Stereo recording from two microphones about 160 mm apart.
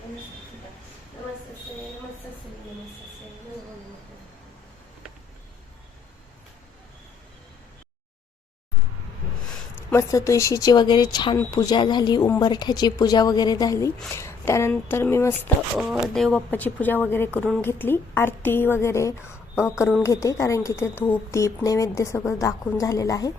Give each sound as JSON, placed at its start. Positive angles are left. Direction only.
{"t": 9.9, "sound": "a woman's voice", "side_deg": 20}
{"t": 15.8, "sound": "a woman's voice", "side_deg": 0}